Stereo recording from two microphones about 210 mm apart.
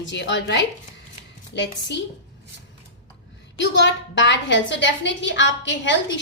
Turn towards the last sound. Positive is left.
turn(degrees=60)  # may be behind; listen again after turning